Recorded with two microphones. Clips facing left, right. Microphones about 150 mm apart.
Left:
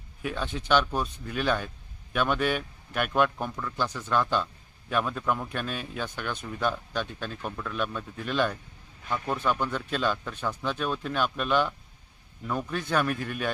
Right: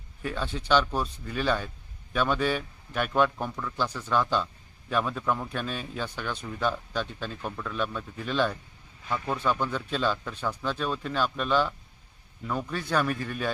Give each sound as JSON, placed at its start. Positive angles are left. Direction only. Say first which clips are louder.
{"t": 0.2, "sound": "a man's voice", "louder": "even", "side_deg": 10}